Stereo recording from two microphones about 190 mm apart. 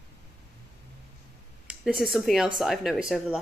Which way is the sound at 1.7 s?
Centre (ahead or behind).